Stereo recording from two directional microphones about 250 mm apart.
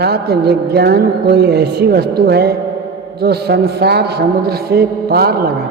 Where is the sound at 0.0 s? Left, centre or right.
Right.